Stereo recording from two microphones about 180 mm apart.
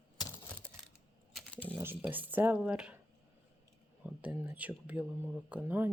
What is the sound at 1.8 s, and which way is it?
Speech, 10° right (ahead or behind).